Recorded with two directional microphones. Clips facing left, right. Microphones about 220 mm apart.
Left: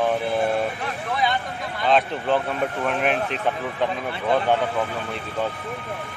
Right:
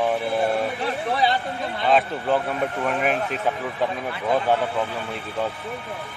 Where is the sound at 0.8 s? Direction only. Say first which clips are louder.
Right 3 dB; 35° right (ahead or behind).